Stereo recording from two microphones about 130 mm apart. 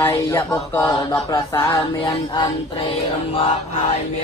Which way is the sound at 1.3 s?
30° left (ahead or behind).